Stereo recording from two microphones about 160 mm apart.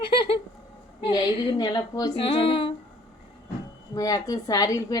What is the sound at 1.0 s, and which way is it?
A woman's voice, 30° left (ahead or behind).